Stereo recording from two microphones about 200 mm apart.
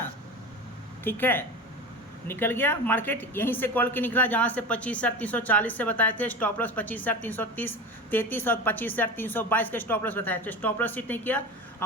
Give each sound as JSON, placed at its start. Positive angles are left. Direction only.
{"t": 1.0, "sound": "a woman's voice", "side_deg": 10}